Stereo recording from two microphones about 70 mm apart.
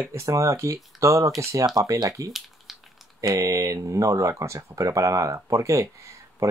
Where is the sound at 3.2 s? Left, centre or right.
Right.